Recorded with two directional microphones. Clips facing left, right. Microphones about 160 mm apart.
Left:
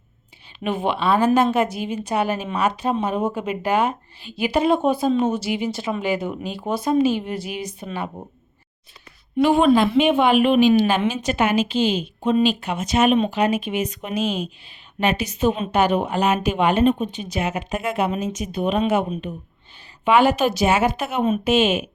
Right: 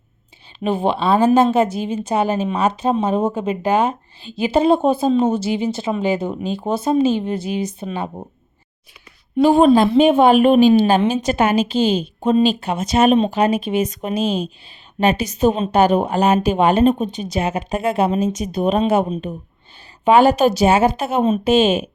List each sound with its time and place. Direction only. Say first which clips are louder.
0.6 s a woman's voice: right 4 dB; 30° right (ahead or behind)
9.4 s a woman's voice: right 4 dB; 35° right (ahead or behind)